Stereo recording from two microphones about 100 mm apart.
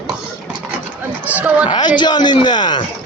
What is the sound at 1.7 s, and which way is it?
Speech, 50° left (ahead or behind).